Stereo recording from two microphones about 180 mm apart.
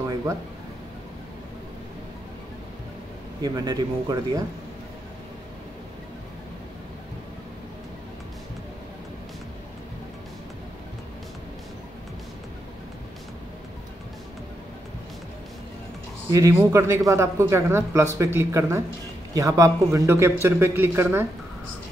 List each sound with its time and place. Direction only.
0.1 s a sound: 15° right (ahead or behind)
3.4 s speech: 20° right (ahead or behind)
16.3 s speech: 15° right (ahead or behind)